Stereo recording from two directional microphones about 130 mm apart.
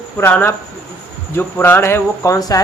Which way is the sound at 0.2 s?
15° left (ahead or behind).